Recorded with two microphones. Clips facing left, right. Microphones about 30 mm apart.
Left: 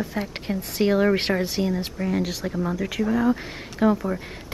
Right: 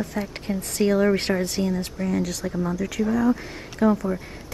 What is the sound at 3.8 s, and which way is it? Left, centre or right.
Speech, centre.